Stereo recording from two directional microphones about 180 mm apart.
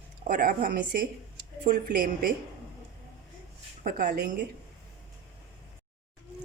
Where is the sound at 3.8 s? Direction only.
50° right (ahead or behind).